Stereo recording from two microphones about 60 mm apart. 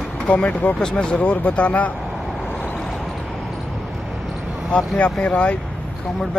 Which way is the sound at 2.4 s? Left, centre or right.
Left.